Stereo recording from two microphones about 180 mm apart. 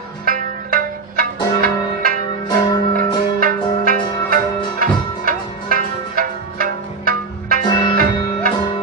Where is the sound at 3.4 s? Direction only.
50° right (ahead or behind).